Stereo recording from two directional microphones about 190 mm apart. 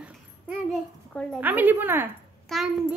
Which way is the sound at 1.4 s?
10° right (ahead or behind).